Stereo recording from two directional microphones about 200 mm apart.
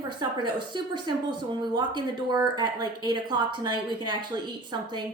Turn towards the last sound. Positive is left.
turn(degrees=-20)  # may be behind; listen again after turning